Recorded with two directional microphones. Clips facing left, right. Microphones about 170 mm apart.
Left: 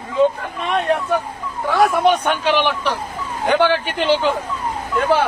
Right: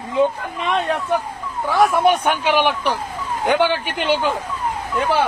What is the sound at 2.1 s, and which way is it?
Speech, 10° right (ahead or behind).